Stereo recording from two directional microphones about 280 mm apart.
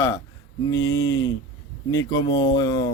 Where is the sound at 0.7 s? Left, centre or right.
Left.